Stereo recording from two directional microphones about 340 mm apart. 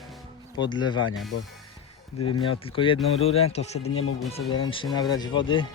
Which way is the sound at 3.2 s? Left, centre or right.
Centre.